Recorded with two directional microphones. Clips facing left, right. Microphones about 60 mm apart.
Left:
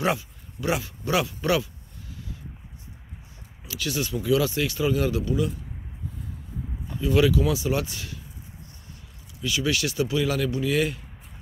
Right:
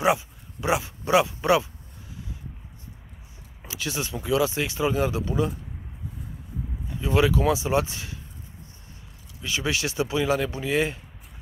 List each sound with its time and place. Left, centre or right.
0.0 s speech: centre
3.6 s speech: right
7.0 s speech: right
9.4 s speech: right